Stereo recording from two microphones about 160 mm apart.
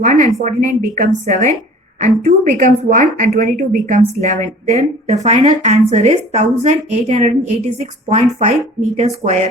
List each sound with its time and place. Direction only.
0.0 s a woman's voice: 55° right (ahead or behind)